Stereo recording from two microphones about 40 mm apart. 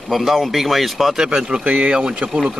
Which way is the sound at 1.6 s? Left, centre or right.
Right.